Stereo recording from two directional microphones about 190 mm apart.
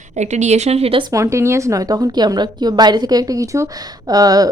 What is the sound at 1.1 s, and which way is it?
A woman's voice, 15° right (ahead or behind).